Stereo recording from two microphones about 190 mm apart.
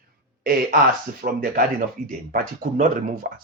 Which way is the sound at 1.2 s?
50° right (ahead or behind).